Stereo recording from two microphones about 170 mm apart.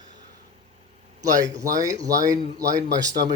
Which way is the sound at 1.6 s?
20° right (ahead or behind).